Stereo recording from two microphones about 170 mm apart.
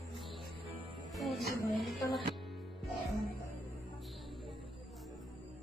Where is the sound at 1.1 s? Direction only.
Centre (ahead or behind).